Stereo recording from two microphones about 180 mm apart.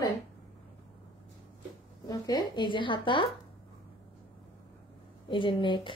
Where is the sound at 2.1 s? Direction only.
20° left (ahead or behind).